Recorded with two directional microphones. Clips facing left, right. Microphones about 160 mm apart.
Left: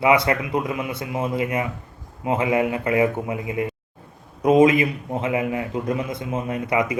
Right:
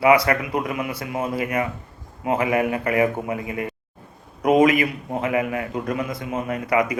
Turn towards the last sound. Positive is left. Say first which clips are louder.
# right 1 dB
turn(degrees=25)  # may be behind; listen again after turning